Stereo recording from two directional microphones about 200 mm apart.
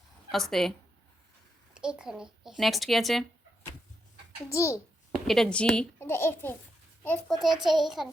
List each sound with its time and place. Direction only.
0.3 s a woman's voice: centre (ahead or behind)
1.7 s a child's voice: 5° right (ahead or behind)
4.4 s a child's voice: 15° left (ahead or behind)
5.2 s a child's voice: centre (ahead or behind)